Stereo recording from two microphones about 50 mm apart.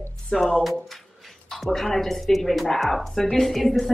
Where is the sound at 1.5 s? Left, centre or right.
Centre.